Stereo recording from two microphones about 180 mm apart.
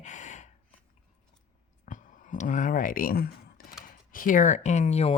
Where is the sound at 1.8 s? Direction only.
45° left (ahead or behind).